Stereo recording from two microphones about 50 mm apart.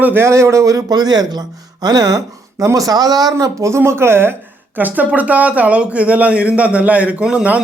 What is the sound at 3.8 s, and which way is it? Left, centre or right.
Speech, right.